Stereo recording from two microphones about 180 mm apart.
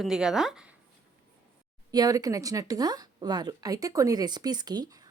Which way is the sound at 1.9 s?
20° right (ahead or behind).